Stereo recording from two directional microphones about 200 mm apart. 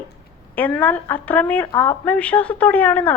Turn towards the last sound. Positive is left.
turn(degrees=10)  # may be behind; listen again after turning